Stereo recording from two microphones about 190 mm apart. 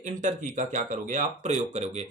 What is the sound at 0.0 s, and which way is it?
Speech, 40° right (ahead or behind).